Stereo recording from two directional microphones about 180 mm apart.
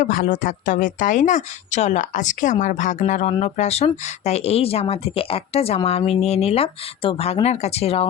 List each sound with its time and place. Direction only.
0.0 s speech: 50° left (ahead or behind)